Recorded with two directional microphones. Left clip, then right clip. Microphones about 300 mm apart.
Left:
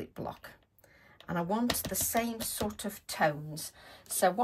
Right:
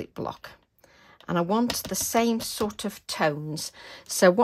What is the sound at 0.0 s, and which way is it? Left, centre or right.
Speech, centre.